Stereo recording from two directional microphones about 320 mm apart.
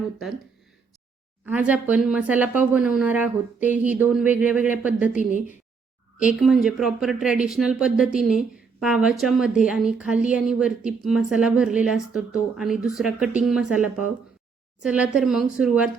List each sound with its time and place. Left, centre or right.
1.5 s a woman's voice: centre
5.1 s a woman's voice: left
6.1 s a woman's voice: centre